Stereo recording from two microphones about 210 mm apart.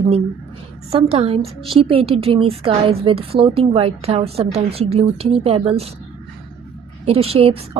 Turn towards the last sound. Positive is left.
turn(degrees=-25)  # may be behind; listen again after turning